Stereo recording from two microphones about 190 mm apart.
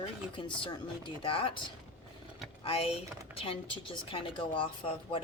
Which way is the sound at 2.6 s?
30° left (ahead or behind).